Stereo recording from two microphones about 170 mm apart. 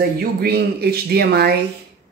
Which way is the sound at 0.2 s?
65° right (ahead or behind).